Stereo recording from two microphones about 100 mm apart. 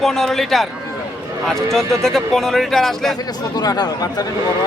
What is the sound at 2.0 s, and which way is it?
Speech, 5° left (ahead or behind).